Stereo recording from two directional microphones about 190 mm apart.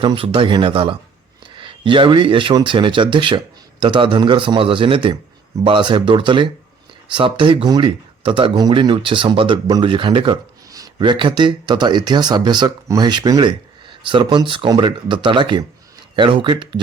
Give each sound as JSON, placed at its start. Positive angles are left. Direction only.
{"t": 0.0, "sound": "speech", "side_deg": -25}